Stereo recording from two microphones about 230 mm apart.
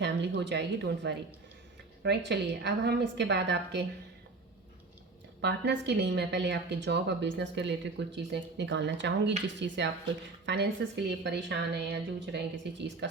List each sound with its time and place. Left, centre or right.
0.0 s a woman's voice: right
5.4 s a woman's voice: right